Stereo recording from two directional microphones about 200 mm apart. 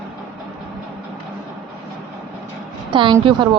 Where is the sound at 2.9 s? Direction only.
25° right (ahead or behind).